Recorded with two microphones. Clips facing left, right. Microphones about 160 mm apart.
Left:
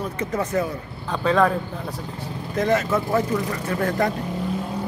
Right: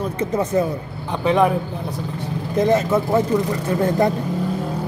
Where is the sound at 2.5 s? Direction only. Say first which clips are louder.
Right 4 dB; 25° right (ahead or behind).